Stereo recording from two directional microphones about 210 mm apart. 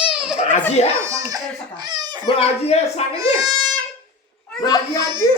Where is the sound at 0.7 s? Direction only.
30° left (ahead or behind).